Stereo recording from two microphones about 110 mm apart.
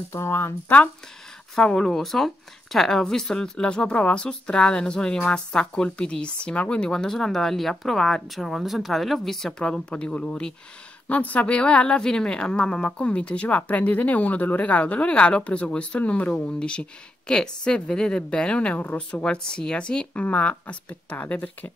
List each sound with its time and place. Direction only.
0.1 s speech: 25° left (ahead or behind)
1.5 s a woman's voice: 5° left (ahead or behind)